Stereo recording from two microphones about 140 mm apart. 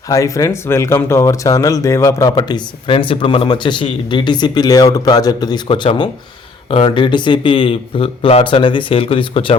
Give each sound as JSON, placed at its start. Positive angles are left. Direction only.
{"t": 0.1, "sound": "speech", "side_deg": 25}
{"t": 2.3, "sound": "speech", "side_deg": 35}